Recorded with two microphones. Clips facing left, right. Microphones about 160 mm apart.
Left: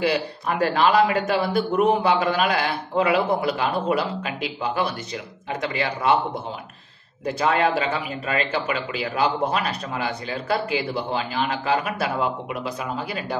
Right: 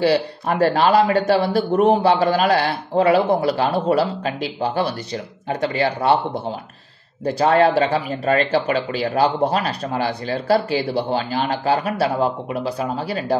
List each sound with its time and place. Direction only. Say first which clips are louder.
0.0 s speech: right 5 dB; 35° right (ahead or behind)
7.2 s speech: right 5 dB; 35° right (ahead or behind)